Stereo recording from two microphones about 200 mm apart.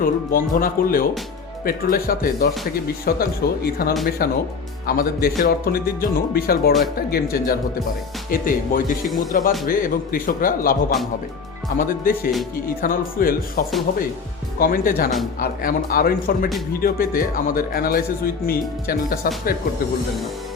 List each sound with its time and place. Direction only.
0.0 s a man's voice: 45° left (ahead or behind)